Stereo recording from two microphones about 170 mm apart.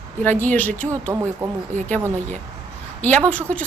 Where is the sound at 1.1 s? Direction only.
15° right (ahead or behind).